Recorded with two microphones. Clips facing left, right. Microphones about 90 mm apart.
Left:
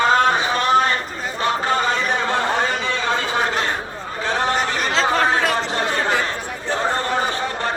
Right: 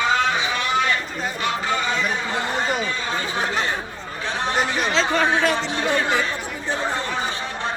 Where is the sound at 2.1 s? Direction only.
65° left (ahead or behind); by 3.5 s 85° left.